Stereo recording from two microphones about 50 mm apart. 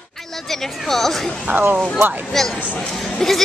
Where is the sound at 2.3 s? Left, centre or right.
Centre.